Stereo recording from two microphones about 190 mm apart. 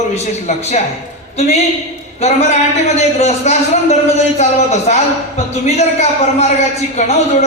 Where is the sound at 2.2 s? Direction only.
35° left (ahead or behind).